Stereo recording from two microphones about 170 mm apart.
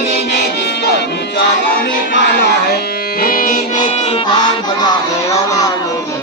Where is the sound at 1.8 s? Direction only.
65° left (ahead or behind).